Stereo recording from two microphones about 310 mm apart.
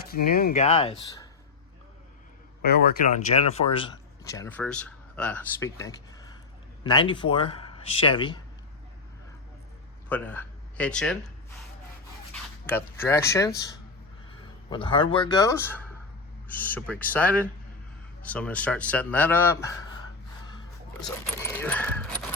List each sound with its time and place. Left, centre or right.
0.1 s speech: left
2.6 s speech: left; by 8.4 s centre
10.1 s speech: centre
12.6 s speech: centre
14.7 s speech: centre
21.0 s speech: centre